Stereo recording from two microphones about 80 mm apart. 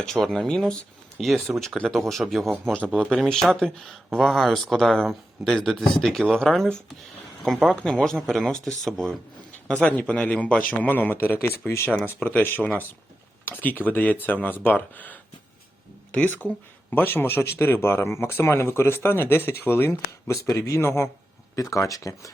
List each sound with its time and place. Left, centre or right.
0.0 s speech: centre
2.7 s speech: centre
9.8 s speech: centre; by 11.9 s left
11.9 s speech: left